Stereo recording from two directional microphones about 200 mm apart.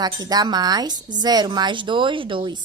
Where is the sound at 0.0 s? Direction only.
20° right (ahead or behind).